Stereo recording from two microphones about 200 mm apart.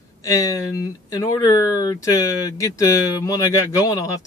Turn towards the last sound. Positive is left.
turn(degrees=15)  # may be behind; listen again after turning